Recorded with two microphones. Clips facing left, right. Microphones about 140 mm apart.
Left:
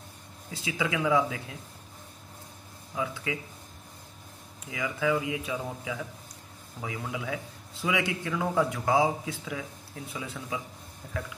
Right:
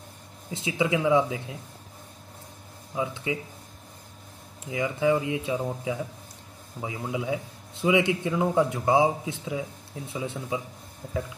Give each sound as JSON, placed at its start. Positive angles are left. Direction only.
{"t": 0.5, "sound": "a man's voice", "side_deg": -25}
{"t": 2.9, "sound": "a man's voice", "side_deg": -25}
{"t": 4.6, "sound": "a man's voice", "side_deg": -25}